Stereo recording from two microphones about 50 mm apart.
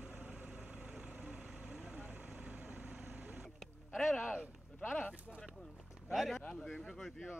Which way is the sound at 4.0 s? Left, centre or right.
Centre.